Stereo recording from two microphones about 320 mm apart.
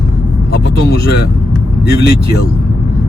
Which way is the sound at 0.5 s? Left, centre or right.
Left.